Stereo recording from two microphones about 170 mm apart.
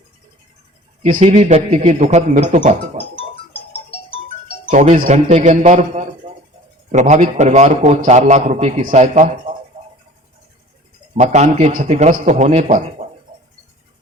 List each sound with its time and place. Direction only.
1.0 s a man's voice: 45° right (ahead or behind)
3.7 s music: 35° left (ahead or behind)
4.7 s a man's voice: 45° right (ahead or behind)
9.8 s a sound: 45° right (ahead or behind)
11.2 s a man's voice: 45° right (ahead or behind)